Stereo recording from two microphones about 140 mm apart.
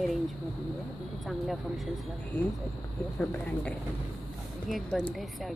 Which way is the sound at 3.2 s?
10° left (ahead or behind).